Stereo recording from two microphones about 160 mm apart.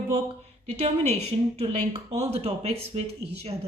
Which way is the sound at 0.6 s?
40° right (ahead or behind).